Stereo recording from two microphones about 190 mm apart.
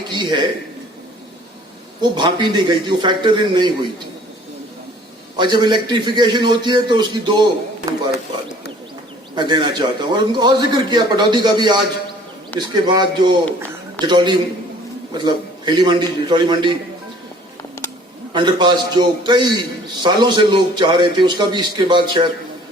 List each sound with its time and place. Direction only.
0.1 s a sound: 25° right (ahead or behind)
2.0 s a man's voice: 25° right (ahead or behind)
5.4 s a man's voice: 25° right (ahead or behind)
9.3 s a man's voice: 25° right (ahead or behind)
17.6 s music: 15° left (ahead or behind)
18.3 s a man's voice: 25° right (ahead or behind)